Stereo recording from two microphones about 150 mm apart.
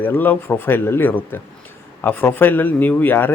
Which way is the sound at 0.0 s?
10° left (ahead or behind).